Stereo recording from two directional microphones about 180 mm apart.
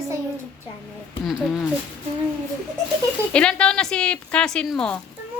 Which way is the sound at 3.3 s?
5° left (ahead or behind).